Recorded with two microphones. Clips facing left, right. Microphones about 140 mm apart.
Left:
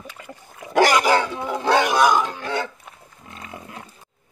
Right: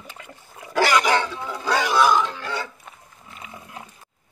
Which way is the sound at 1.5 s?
55° left (ahead or behind).